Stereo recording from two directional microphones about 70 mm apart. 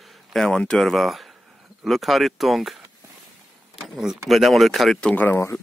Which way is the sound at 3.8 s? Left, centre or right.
Centre.